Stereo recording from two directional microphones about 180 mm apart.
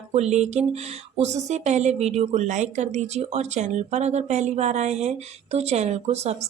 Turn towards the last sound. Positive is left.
turn(degrees=-35)  # may be behind; listen again after turning